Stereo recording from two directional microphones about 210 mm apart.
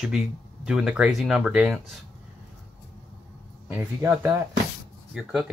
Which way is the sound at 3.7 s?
10° right (ahead or behind).